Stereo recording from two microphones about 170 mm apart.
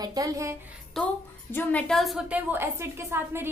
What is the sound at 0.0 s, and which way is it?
Speech, 20° right (ahead or behind).